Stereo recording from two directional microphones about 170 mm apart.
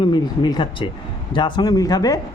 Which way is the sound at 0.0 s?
25° left (ahead or behind).